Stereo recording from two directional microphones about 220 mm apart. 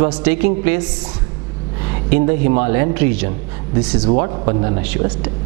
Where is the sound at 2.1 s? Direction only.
10° right (ahead or behind).